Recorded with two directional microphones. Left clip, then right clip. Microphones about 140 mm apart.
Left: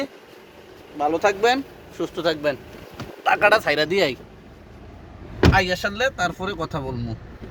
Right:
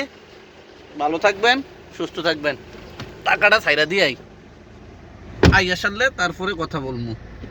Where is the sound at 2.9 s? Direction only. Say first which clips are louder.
Right 1 dB; 55° left (ahead or behind).